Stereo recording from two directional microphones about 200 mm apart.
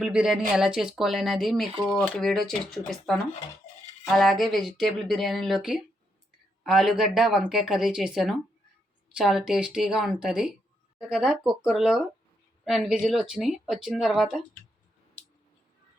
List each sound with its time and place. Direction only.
0.0 s speech: 5° right (ahead or behind)